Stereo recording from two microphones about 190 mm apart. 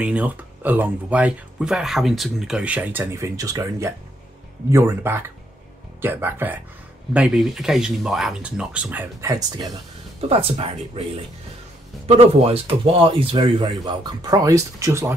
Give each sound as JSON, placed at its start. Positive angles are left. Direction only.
{"t": 0.0, "sound": "speech", "side_deg": -5}
{"t": 10.2, "sound": "speech", "side_deg": -35}
{"t": 12.2, "sound": "speech", "side_deg": -30}